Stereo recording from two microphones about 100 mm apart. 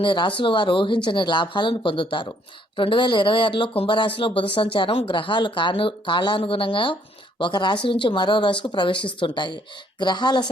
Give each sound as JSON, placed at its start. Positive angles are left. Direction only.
{"t": 0.0, "sound": "a woman's voice", "side_deg": 55}